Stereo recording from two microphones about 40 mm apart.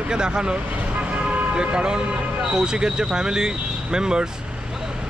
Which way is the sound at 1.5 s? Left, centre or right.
Right.